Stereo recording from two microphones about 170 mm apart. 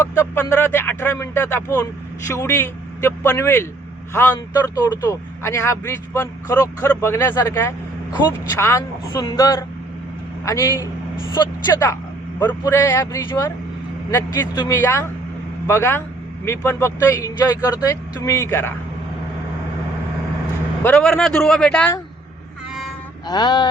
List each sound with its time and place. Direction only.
0.2 s a man's voice: 15° left (ahead or behind)
20.8 s speech: 5° left (ahead or behind)
23.2 s a sound: 25° left (ahead or behind)